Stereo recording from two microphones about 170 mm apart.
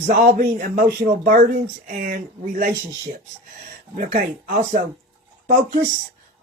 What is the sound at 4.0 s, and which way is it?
Speech, 50° right (ahead or behind).